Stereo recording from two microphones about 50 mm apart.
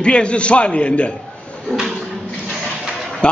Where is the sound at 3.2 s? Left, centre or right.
Centre.